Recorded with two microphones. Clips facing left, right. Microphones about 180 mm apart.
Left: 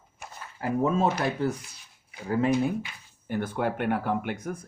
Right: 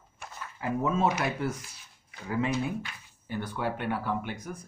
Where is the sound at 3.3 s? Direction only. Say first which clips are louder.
Left 4 dB; 50° left (ahead or behind).